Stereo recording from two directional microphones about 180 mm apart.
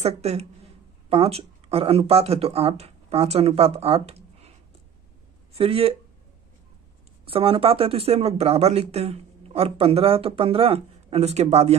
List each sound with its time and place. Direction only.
0.0 s speech: 35° right (ahead or behind)
5.6 s speech: 30° right (ahead or behind)
7.2 s speech: 30° right (ahead or behind)